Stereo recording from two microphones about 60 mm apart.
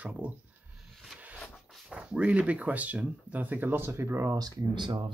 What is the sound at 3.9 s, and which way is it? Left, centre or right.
Speech, right.